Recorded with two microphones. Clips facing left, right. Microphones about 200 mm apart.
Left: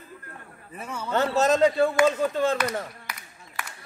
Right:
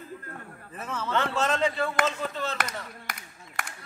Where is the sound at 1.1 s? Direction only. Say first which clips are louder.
Left 6 dB; 40° left (ahead or behind).